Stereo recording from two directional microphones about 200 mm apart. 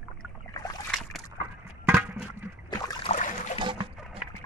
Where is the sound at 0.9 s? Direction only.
Centre (ahead or behind).